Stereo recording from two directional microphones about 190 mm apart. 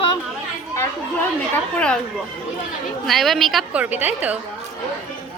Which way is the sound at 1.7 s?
5° left (ahead or behind).